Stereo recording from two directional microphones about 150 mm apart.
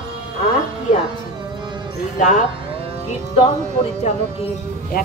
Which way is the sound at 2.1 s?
55° left (ahead or behind).